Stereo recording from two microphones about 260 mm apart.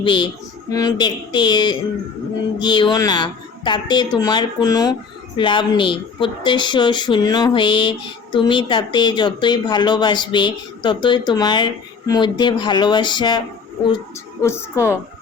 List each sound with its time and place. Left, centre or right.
0.0 s speech: centre
14.4 s speech: centre